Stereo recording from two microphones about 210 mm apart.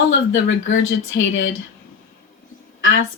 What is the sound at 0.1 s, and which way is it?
Speech, 60° left (ahead or behind).